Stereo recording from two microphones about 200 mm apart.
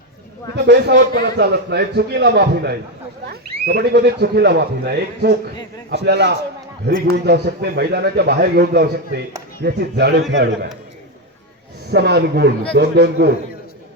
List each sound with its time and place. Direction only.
0.5 s a man's voice: 55° right (ahead or behind)
11.9 s a man's voice: 55° right (ahead or behind)